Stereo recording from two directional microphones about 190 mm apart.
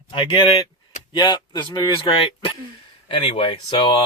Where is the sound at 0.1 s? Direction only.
25° left (ahead or behind).